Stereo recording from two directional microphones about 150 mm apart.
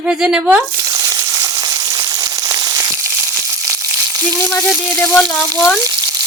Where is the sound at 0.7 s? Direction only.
25° right (ahead or behind).